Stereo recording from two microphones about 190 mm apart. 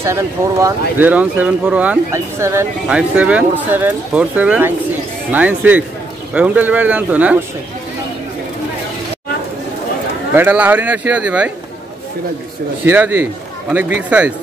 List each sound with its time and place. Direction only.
0.0 s speech: 15° right (ahead or behind)
10.3 s speech: 10° right (ahead or behind)
12.8 s speech: 10° right (ahead or behind)